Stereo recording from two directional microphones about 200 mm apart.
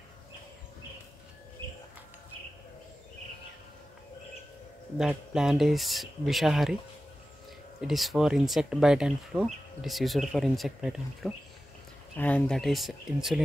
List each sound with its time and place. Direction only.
4.9 s speech: 5° right (ahead or behind)
7.8 s speech: centre (ahead or behind)
12.2 s speech: 5° left (ahead or behind)